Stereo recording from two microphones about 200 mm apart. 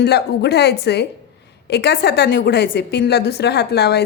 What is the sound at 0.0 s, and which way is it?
A woman's voice, 55° left (ahead or behind).